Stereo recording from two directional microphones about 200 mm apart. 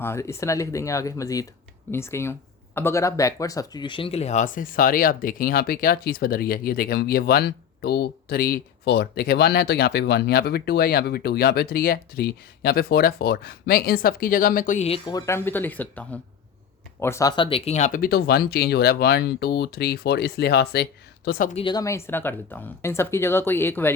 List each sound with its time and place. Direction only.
0.0 s speech: 15° left (ahead or behind); by 21.5 s 45° left (ahead or behind)
21.5 s speech: 25° left (ahead or behind)